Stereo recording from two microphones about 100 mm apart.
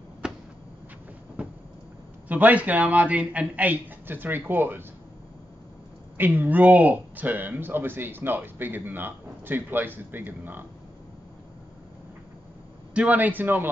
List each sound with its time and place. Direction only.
0.2 s a sound: 5° right (ahead or behind)
1.4 s vehicle: 10° right (ahead or behind)
2.2 s speech: 15° right (ahead or behind)
6.1 s speech: 20° right (ahead or behind)
12.9 s speech: 15° right (ahead or behind)